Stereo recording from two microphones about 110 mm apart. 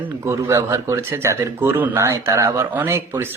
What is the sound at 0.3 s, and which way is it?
Speech, 25° right (ahead or behind).